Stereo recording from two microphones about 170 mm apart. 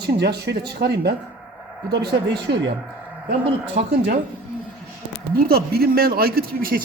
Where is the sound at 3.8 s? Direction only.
70° right (ahead or behind).